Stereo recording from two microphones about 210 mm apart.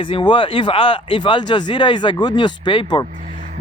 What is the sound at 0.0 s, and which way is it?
Speech, 25° left (ahead or behind).